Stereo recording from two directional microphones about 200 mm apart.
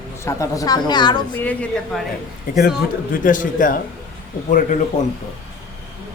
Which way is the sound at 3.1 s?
40° left (ahead or behind).